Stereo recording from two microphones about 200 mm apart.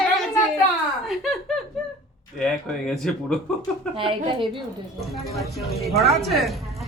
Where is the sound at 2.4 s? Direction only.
Centre (ahead or behind).